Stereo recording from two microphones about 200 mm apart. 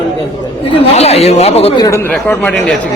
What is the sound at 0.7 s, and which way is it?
Speech, 30° left (ahead or behind).